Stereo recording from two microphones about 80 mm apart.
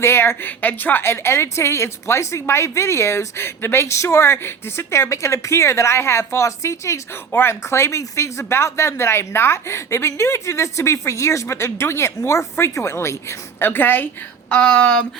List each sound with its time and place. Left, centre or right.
0.0 s a woman's voice: left
14.5 s speech: centre